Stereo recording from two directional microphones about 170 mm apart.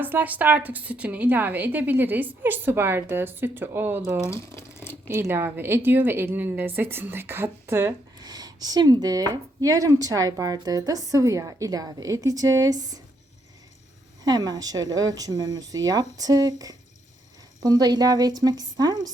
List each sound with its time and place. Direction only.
0.0 s a woman's voice: 10° right (ahead or behind)
4.3 s a sound: 15° left (ahead or behind)
5.0 s a woman's voice: 15° right (ahead or behind)
14.3 s a woman's voice: 20° right (ahead or behind)